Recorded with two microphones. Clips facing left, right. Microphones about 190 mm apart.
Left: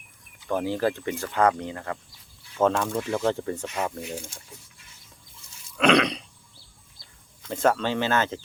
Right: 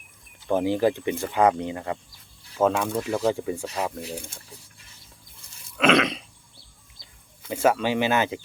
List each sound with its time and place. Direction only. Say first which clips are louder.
0.4 s speech: right 3 dB; 20° right (ahead or behind)
2.6 s speech: right 1 dB; 10° right (ahead or behind)
5.7 s throat clearing: even; centre (ahead or behind)
7.4 s speech: right 1 dB; 10° right (ahead or behind)